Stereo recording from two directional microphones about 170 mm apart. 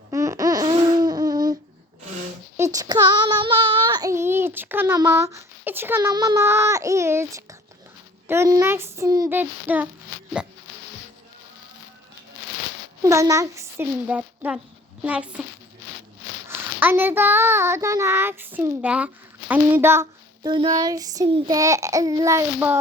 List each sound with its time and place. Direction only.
0.1 s laughter: 20° right (ahead or behind)
2.6 s child singing: 20° right (ahead or behind)
8.3 s a child's voice: 15° right (ahead or behind)
9.3 s a child's voice: 10° right (ahead or behind)
13.0 s a child's voice: 20° right (ahead or behind)
16.5 s a child's voice: 15° right (ahead or behind)
20.5 s child singing: 25° right (ahead or behind)